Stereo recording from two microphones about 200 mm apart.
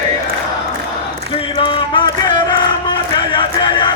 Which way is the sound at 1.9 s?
20° left (ahead or behind).